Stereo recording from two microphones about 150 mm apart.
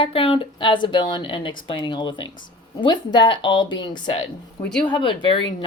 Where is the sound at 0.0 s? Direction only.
35° left (ahead or behind).